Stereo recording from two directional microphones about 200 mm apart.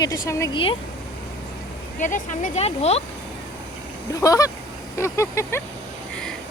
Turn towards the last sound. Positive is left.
turn(degrees=15)  # may be behind; listen again after turning